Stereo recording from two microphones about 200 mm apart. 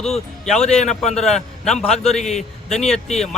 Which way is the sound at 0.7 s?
35° left (ahead or behind).